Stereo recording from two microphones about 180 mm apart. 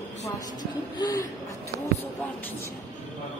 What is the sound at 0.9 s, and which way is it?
Speech, 20° left (ahead or behind).